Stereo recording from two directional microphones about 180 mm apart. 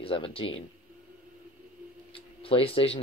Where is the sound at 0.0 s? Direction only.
30° left (ahead or behind).